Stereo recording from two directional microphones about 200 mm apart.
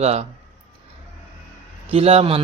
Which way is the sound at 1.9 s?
30° right (ahead or behind).